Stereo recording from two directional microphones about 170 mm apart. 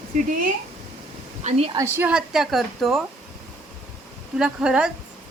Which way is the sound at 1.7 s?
15° right (ahead or behind).